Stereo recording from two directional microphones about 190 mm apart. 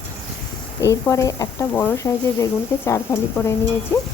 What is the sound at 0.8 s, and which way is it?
Speech, 15° left (ahead or behind).